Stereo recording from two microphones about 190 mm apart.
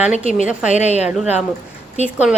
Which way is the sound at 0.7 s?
35° left (ahead or behind).